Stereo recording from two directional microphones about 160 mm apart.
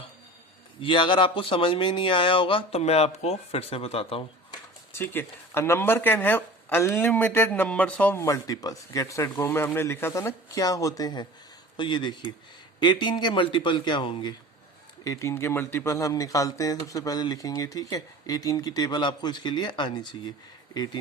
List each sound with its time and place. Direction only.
0.8 s speech: 30° left (ahead or behind)
4.9 s speech: 15° left (ahead or behind); by 14.3 s 30° left (ahead or behind)
15.0 s speech: 20° left (ahead or behind)